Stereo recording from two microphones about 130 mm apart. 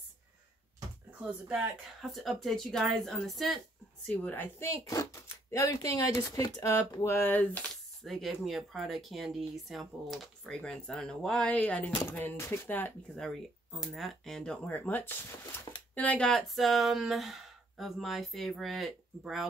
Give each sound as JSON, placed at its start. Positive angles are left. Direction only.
{"t": 1.2, "sound": "speech", "side_deg": -5}
{"t": 4.1, "sound": "speech", "side_deg": 15}
{"t": 8.0, "sound": "speech", "side_deg": 0}
{"t": 13.2, "sound": "speech", "side_deg": 0}